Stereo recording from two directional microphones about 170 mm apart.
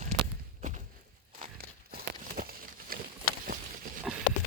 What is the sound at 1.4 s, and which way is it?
Crumpling, 60° right (ahead or behind).